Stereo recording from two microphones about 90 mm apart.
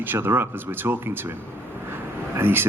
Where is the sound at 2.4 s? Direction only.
25° right (ahead or behind).